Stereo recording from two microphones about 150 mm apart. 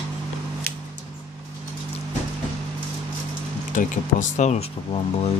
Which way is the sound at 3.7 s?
55° left (ahead or behind).